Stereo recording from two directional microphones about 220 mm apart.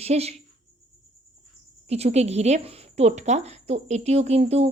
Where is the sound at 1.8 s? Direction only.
30° right (ahead or behind).